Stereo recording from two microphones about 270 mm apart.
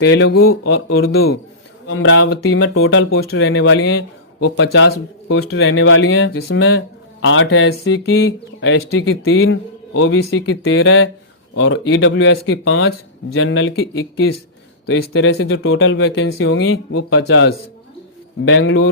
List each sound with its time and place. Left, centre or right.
0.0 s speech: left
0.6 s speech: left